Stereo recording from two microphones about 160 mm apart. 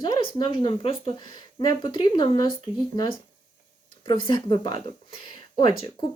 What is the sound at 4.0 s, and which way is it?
Speech, 30° left (ahead or behind).